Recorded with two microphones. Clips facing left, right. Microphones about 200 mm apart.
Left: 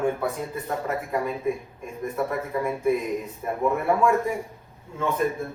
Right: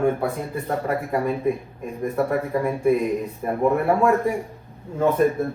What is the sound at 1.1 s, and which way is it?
A man's voice, 50° right (ahead or behind).